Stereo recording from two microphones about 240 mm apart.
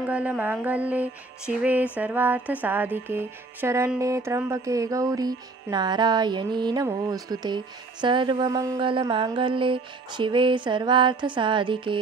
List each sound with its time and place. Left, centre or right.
0.0 s music: centre